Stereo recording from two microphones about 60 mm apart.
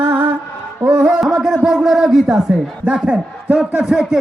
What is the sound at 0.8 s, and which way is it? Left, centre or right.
Music, centre.